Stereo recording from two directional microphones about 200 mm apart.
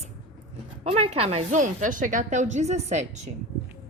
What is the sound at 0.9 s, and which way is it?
A woman's voice, 30° right (ahead or behind).